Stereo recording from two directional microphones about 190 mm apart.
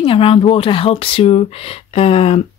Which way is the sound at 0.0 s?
30° left (ahead or behind).